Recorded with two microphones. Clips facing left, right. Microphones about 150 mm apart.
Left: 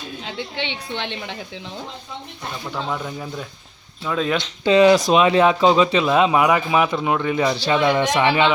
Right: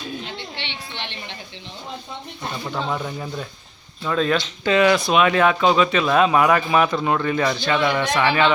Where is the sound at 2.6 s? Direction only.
Centre (ahead or behind).